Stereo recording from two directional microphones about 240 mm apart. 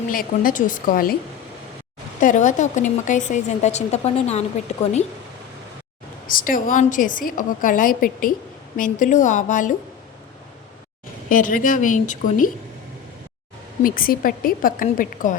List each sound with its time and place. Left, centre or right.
0.1 s a woman's voice: left
2.2 s a woman's voice: left
6.3 s a woman's voice: left
11.3 s a woman's voice: left
13.8 s a woman's voice: left